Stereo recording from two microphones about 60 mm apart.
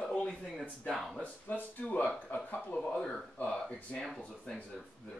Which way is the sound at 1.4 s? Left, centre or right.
Left.